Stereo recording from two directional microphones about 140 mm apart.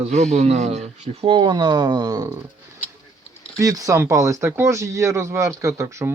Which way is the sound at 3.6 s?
25° right (ahead or behind).